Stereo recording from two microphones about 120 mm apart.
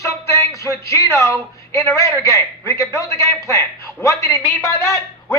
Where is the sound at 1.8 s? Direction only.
25° left (ahead or behind).